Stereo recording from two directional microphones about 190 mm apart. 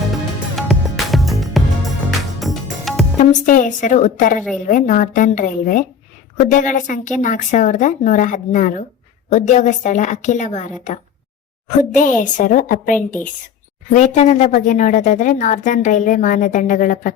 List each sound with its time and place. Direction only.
0.5 s music: centre (ahead or behind)
3.2 s a woman's voice: 45° left (ahead or behind)